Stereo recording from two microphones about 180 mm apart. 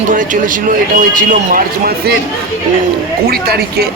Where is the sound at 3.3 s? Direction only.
60° right (ahead or behind).